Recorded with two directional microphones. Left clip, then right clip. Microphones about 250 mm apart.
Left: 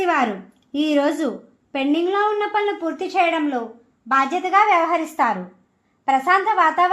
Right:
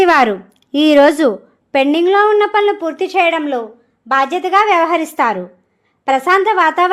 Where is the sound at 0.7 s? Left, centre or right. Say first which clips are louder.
Right 10 dB; right.